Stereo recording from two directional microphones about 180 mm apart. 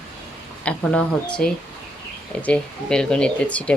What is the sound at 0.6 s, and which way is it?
Speech, 5° left (ahead or behind).